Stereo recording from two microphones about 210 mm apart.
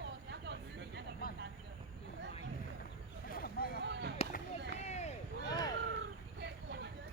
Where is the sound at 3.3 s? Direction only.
45° left (ahead or behind).